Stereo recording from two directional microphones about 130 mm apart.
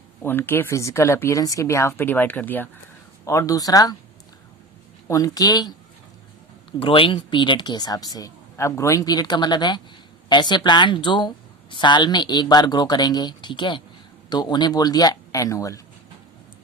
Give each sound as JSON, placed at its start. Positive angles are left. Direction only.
{"t": 0.2, "sound": "speech", "side_deg": 15}
{"t": 3.2, "sound": "speech", "side_deg": 25}
{"t": 5.0, "sound": "speech", "side_deg": 25}
{"t": 6.7, "sound": "speech", "side_deg": 45}